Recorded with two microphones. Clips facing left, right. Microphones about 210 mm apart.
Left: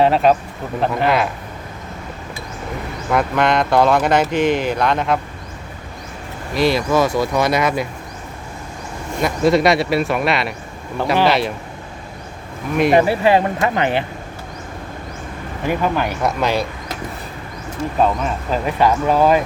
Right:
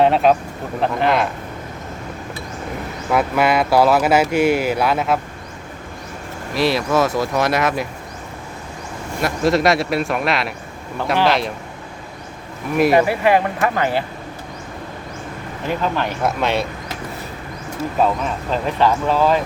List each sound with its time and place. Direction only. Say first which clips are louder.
0.0 s speech: even; centre (ahead or behind)
3.1 s speech: even; 5° right (ahead or behind)
6.5 s speech: left 1 dB; centre (ahead or behind)
9.2 s speech: left 2 dB; centre (ahead or behind)
12.7 s speech: even; 5° right (ahead or behind)
13.1 s speech: left 1 dB; 25° left (ahead or behind)
15.6 s speech: left 2 dB; 10° left (ahead or behind)
16.2 s speech: even; centre (ahead or behind)
18.0 s speech: left 1 dB; 5° left (ahead or behind)